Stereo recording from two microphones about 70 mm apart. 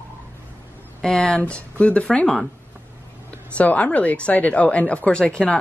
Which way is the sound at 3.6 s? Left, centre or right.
Centre.